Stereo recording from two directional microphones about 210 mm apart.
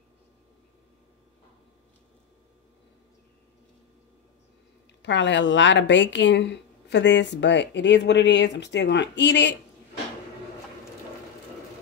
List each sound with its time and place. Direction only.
5.0 s a woman's voice: 55° left (ahead or behind)